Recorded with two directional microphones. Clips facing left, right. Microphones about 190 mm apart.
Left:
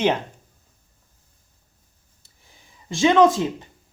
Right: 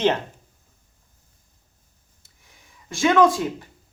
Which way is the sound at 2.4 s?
25° left (ahead or behind).